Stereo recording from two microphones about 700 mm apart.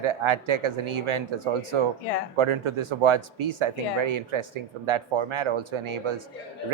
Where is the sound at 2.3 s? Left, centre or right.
Right.